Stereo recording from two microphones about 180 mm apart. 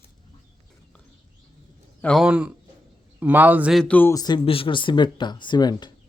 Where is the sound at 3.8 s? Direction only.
10° left (ahead or behind).